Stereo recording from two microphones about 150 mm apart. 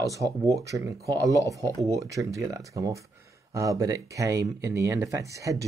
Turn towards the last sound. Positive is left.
turn(degrees=-20)  # may be behind; listen again after turning